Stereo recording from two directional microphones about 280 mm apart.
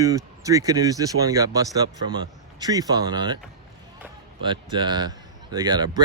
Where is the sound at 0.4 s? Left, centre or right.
Centre.